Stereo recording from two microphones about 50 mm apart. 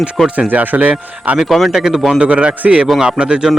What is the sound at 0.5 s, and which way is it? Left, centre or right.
Speech, right.